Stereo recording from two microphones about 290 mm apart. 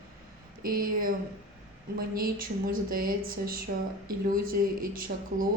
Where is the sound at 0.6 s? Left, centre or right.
Right.